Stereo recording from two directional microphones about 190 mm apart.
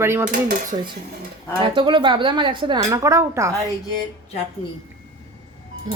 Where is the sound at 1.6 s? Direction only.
25° right (ahead or behind).